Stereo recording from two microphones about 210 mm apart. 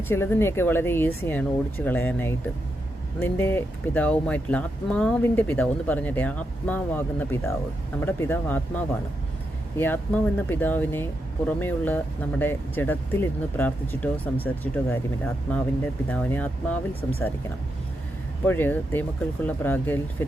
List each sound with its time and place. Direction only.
0.1 s speech: 10° left (ahead or behind)
18.4 s speech: 10° left (ahead or behind)